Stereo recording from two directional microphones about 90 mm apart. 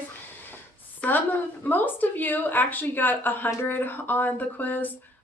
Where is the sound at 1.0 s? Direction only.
20° left (ahead or behind).